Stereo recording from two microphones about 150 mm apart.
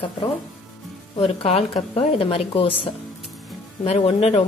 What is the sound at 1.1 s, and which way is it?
A woman's voice, 40° left (ahead or behind).